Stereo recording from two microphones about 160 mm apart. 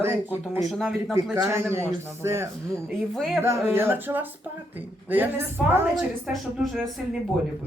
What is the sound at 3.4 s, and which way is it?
A man's voice, 15° right (ahead or behind).